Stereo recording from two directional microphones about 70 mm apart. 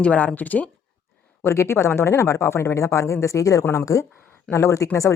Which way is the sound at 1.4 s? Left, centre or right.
Left.